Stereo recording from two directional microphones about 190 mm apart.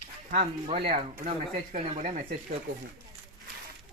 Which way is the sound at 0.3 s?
40° right (ahead or behind).